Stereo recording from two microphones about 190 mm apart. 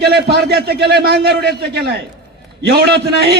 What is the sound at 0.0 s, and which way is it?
A man's voice, 55° right (ahead or behind).